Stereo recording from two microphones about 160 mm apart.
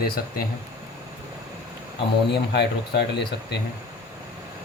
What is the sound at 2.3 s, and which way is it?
Speech, 90° left.